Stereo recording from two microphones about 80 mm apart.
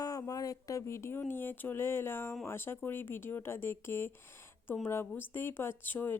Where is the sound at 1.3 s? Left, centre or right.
Left.